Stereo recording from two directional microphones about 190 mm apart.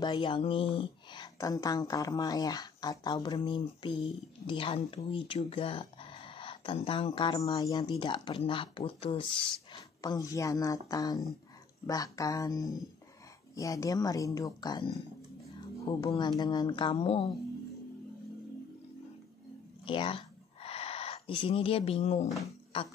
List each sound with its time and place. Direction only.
0.0 s speech: 25° left (ahead or behind)
15.9 s speech: 25° left (ahead or behind)
19.8 s a sound: 25° left (ahead or behind)